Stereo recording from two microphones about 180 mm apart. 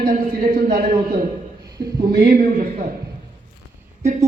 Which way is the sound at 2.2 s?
50° right (ahead or behind).